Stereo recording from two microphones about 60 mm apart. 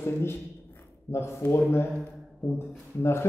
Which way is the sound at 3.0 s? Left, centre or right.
Left.